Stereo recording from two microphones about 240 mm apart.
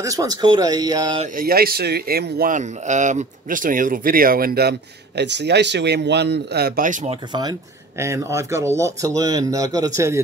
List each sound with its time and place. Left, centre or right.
0.0 s speech: centre; by 7.2 s right
8.0 s speech: centre